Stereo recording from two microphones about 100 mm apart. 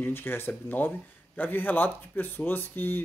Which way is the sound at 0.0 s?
20° left (ahead or behind).